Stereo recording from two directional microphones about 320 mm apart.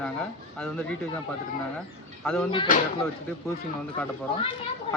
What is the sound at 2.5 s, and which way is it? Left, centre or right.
Speech, left.